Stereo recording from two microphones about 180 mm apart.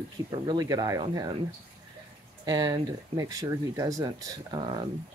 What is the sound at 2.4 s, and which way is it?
Speech, 20° right (ahead or behind).